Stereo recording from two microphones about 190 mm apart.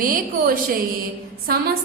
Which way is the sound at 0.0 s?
45° right (ahead or behind).